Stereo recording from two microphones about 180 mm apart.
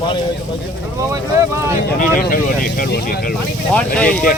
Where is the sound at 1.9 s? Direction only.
50° left (ahead or behind).